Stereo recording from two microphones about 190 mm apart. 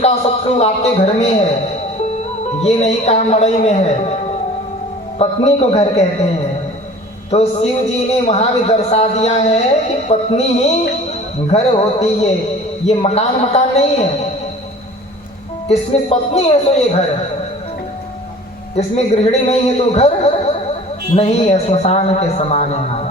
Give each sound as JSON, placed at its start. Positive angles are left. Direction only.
{"t": 0.0, "sound": "a man's voice", "side_deg": 35}
{"t": 7.3, "sound": "a man's voice", "side_deg": 35}
{"t": 15.7, "sound": "a man's voice", "side_deg": 35}
{"t": 18.8, "sound": "a man's voice", "side_deg": 35}
{"t": 21.2, "sound": "a man's voice", "side_deg": 35}